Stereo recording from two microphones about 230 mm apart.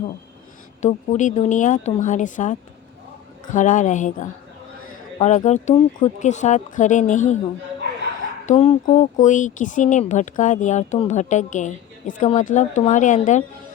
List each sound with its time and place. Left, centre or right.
0.8 s speech: left
8.4 s speech: left